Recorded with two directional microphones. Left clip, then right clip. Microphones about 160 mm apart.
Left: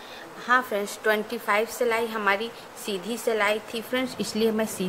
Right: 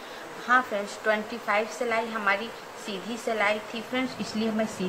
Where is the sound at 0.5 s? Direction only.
70° left (ahead or behind).